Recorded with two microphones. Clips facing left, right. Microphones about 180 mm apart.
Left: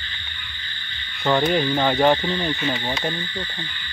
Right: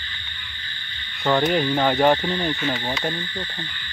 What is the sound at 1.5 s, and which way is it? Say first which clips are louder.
Speech: even; 5° right (ahead or behind).